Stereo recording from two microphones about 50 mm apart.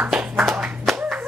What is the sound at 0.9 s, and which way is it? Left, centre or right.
Clapping, centre.